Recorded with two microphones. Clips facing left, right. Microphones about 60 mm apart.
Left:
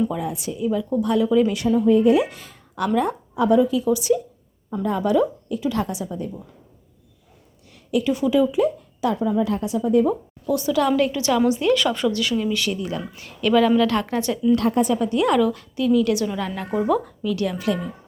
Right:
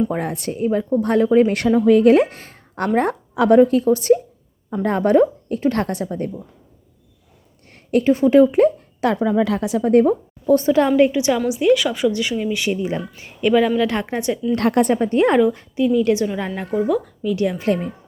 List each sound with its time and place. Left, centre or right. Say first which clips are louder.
0.1 s a woman's voice: right 3 dB; right
1.5 s speech: right 3 dB; right
2.1 s a woman's voice: right 4 dB; right
3.1 s a woman's voice: right 4 dB; right
3.6 s a woman's voice: right 5 dB; right
4.7 s a woman's voice: right 4 dB; right
7.7 s a woman's voice: right 5 dB; right
10.1 s a woman's voice: right 6 dB; right
10.9 s a woman's voice: right 4 dB; right
12.1 s a woman's voice: right 1 dB; centre
14.6 s speech: right 3 dB; right
14.9 s a woman's voice: right 3 dB; right
16.7 s speech: right 1 dB; centre
17.2 s a woman's voice: right 5 dB; centre